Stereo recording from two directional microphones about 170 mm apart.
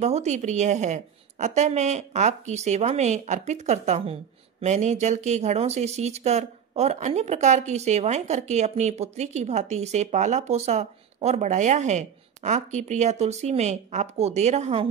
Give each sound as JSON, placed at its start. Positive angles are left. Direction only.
{"t": 0.0, "sound": "a woman's voice", "side_deg": -40}